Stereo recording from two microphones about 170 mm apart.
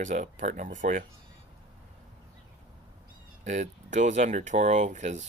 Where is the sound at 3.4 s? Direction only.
45° right (ahead or behind).